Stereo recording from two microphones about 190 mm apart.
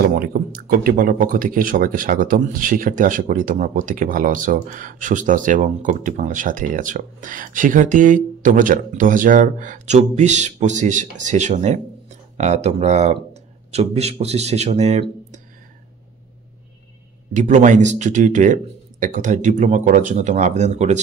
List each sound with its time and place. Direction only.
0.1 s a man's voice: 50° right (ahead or behind); by 15.4 s 35° right (ahead or behind)
17.3 s a man's voice: 40° right (ahead or behind)